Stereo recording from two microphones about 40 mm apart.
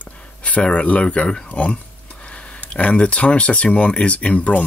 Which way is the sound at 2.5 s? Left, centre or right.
Left.